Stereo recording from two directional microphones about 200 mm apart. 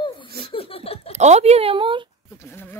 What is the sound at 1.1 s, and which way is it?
Speech, 35° right (ahead or behind).